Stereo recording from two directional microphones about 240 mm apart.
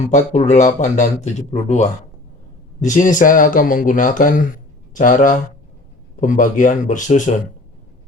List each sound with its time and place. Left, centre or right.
0.1 s speech: left